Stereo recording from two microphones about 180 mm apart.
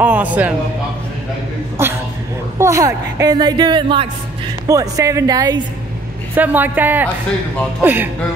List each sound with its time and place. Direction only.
0.0 s speech: 10° right (ahead or behind)
1.8 s a woman's voice: 15° right (ahead or behind)
6.3 s speech: 10° right (ahead or behind)